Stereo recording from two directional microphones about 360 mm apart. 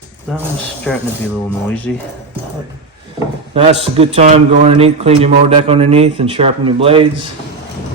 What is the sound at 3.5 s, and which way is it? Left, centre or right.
A man's voice, centre.